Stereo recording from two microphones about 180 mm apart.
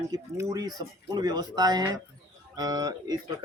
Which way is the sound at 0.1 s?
20° right (ahead or behind).